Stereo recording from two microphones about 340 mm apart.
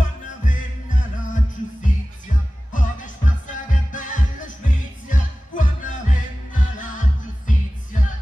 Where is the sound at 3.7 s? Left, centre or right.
Left.